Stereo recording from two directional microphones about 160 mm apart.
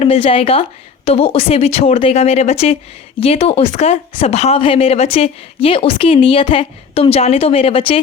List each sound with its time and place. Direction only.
0.0 s speech: 35° left (ahead or behind)